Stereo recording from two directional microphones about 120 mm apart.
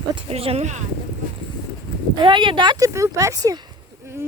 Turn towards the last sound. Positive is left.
turn(degrees=-20)  # may be behind; listen again after turning